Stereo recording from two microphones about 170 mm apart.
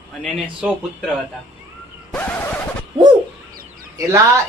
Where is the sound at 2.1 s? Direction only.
10° left (ahead or behind).